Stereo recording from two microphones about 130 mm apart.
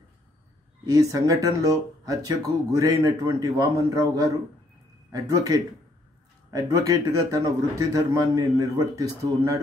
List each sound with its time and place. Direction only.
0.8 s speech: 30° right (ahead or behind)